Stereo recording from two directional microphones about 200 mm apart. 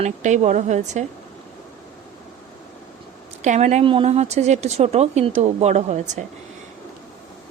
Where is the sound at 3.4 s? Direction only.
35° right (ahead or behind).